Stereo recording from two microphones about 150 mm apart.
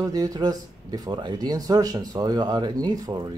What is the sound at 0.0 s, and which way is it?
Speech, 25° right (ahead or behind).